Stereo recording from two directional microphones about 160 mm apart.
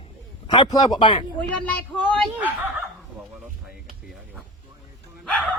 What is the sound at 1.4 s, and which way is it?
Speech, 10° left (ahead or behind).